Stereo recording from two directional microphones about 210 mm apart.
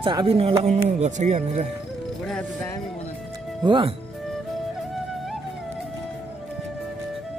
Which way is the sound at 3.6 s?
25° right (ahead or behind).